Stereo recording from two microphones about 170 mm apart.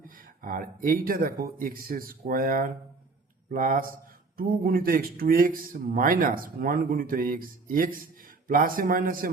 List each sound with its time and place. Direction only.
0.0 s speech: 55° right (ahead or behind)